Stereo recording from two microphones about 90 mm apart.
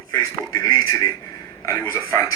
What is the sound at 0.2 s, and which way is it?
A man's voice, 40° left (ahead or behind).